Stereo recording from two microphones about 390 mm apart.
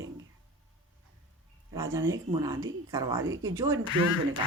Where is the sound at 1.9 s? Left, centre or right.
Centre.